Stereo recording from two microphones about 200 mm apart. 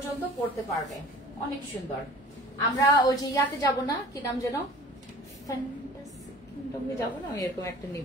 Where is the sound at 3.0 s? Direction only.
15° left (ahead or behind).